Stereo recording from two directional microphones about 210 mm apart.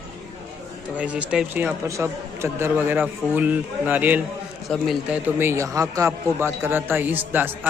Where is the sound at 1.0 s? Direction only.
5° right (ahead or behind).